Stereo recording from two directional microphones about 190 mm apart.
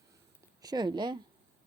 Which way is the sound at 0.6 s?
20° right (ahead or behind).